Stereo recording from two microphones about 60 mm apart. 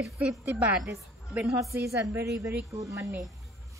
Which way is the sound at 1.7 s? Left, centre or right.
Right.